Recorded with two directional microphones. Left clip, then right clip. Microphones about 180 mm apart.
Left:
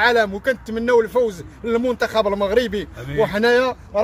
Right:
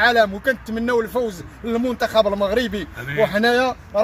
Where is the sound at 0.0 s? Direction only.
25° left (ahead or behind).